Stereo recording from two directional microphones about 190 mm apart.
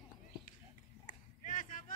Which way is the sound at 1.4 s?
45° left (ahead or behind).